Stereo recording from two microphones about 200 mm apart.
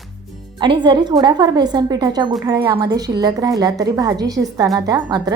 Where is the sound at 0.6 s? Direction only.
25° right (ahead or behind).